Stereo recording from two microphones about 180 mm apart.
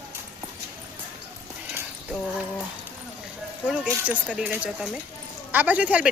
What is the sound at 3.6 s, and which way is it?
Speech, 5° right (ahead or behind).